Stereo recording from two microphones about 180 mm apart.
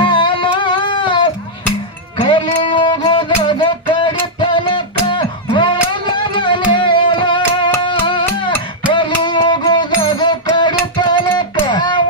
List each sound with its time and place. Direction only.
0.0 s music: 25° left (ahead or behind)